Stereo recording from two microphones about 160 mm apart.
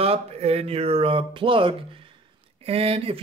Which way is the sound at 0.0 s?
40° right (ahead or behind).